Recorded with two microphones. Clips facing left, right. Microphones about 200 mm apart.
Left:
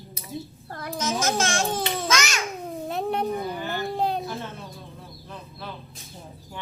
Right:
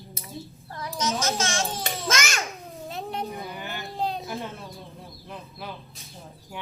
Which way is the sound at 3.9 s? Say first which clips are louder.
Left 2 dB; 55° left (ahead or behind).